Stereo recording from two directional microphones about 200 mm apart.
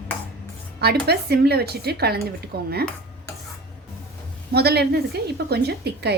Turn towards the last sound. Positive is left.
turn(degrees=-55)  # may be behind; listen again after turning